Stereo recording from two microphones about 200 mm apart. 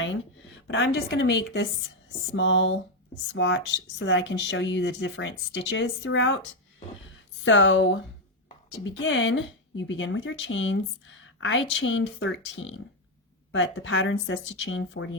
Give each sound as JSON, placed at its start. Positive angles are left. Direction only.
{"t": 0.7, "sound": "speech", "side_deg": 70}
{"t": 7.4, "sound": "speech", "side_deg": 70}